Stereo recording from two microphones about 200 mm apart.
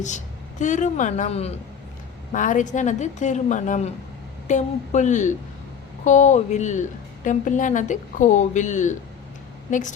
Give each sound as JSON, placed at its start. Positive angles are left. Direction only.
{"t": 0.6, "sound": "a woman's voice", "side_deg": 40}